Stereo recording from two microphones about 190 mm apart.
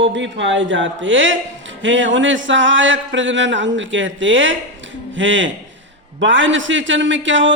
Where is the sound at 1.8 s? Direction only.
80° right.